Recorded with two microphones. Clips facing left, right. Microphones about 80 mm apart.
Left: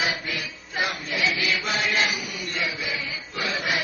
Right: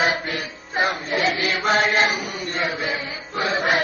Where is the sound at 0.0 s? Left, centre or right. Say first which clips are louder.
Right 6 dB; right.